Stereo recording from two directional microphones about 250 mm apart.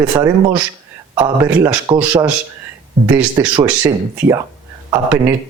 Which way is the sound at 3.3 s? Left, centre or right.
Centre.